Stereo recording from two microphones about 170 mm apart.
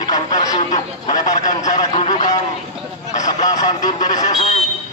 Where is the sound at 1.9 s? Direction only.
40° left (ahead or behind).